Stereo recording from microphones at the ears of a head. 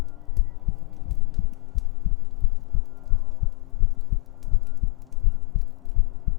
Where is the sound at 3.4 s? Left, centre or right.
Left.